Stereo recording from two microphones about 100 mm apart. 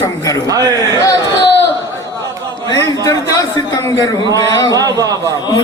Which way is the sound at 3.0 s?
35° left (ahead or behind).